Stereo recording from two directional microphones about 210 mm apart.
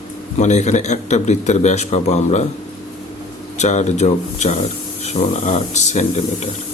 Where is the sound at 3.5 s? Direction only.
35° left (ahead or behind).